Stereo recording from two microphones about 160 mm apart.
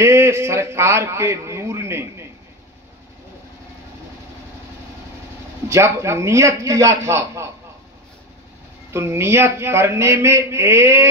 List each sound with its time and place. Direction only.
0.0 s a man's voice: 15° right (ahead or behind)
5.7 s a man's voice: 15° right (ahead or behind)
8.9 s a man's voice: 15° right (ahead or behind)